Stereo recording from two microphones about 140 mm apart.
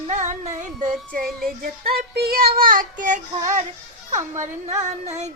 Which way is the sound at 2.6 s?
80° right.